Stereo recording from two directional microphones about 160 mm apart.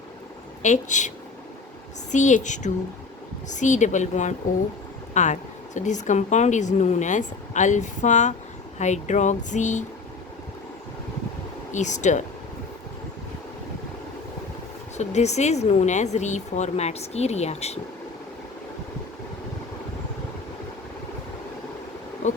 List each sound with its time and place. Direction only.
0.6 s a woman's voice: 50° left (ahead or behind)
2.1 s a woman's voice: 50° left (ahead or behind)
11.7 s a woman's voice: 50° left (ahead or behind)
14.9 s a woman's voice: 45° left (ahead or behind)